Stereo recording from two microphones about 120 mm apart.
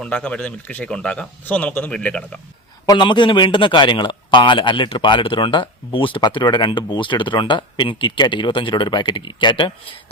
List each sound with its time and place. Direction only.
0.0 s speech: 10° left (ahead or behind)
2.8 s a man's voice: 35° left (ahead or behind)